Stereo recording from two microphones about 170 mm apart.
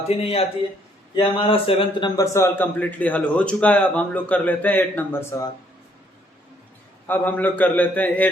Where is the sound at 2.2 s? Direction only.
15° left (ahead or behind).